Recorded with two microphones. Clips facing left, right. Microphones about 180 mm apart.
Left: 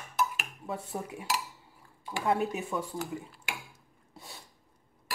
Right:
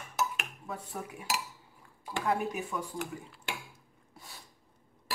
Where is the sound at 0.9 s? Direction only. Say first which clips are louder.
Left 2 dB; 25° left (ahead or behind).